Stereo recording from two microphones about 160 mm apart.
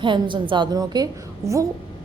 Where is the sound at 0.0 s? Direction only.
30° right (ahead or behind).